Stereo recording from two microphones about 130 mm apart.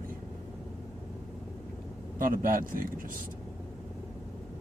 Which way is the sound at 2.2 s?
90° right.